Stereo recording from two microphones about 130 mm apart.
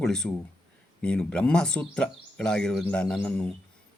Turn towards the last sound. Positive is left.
turn(degrees=10)  # may be behind; listen again after turning